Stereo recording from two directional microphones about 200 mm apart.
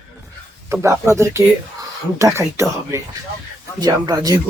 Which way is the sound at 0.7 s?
15° right (ahead or behind).